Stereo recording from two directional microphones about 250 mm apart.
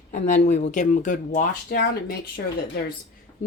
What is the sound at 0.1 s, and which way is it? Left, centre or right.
Speech, left.